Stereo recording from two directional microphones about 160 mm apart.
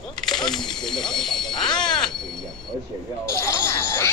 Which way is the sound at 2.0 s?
Centre (ahead or behind).